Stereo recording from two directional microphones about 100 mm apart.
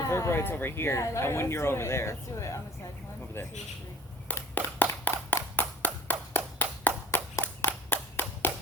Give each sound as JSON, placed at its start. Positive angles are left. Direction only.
{"t": 0.0, "sound": "speech", "side_deg": 30}
{"t": 4.4, "sound": "a sound", "side_deg": 20}
{"t": 5.0, "sound": "clapping", "side_deg": 20}